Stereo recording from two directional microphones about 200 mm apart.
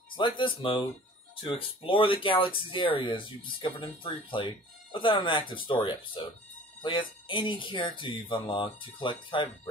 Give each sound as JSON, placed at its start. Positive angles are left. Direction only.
{"t": 0.1, "sound": "speech", "side_deg": 25}